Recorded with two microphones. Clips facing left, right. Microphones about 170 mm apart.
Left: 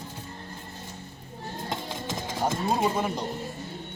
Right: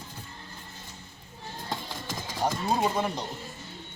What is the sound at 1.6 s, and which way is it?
Music, 20° left (ahead or behind).